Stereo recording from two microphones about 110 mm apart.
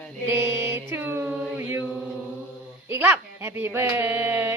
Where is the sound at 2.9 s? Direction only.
20° right (ahead or behind).